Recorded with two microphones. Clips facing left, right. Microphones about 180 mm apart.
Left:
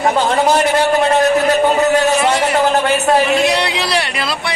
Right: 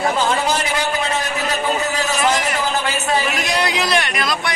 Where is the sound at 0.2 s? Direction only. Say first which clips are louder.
Left 6 dB; 60° left (ahead or behind).